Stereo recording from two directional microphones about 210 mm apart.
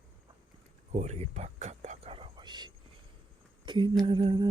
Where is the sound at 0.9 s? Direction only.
35° right (ahead or behind).